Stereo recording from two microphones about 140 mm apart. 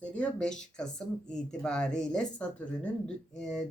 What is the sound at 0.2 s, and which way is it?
Speech, 5° left (ahead or behind).